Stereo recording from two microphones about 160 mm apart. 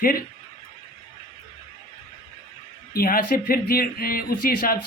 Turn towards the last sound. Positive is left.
turn(degrees=65)  # may be behind; listen again after turning